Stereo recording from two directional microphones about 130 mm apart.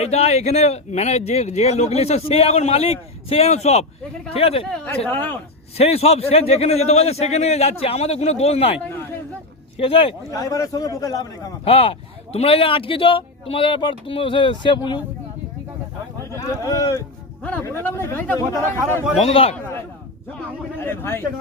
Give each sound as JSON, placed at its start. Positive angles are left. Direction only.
{"t": 0.0, "sound": "a man's voice", "side_deg": 55}
{"t": 5.0, "sound": "speech", "side_deg": 15}
{"t": 5.7, "sound": "a man's voice", "side_deg": 50}
{"t": 10.3, "sound": "a man's voice", "side_deg": 25}
{"t": 11.6, "sound": "a man's voice", "side_deg": 45}
{"t": 16.3, "sound": "speech", "side_deg": 25}
{"t": 17.4, "sound": "speech", "side_deg": 10}
{"t": 19.2, "sound": "a man's voice", "side_deg": 50}
{"t": 20.8, "sound": "speech", "side_deg": 15}